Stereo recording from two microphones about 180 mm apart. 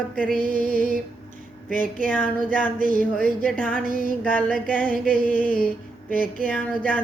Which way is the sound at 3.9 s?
50° left (ahead or behind).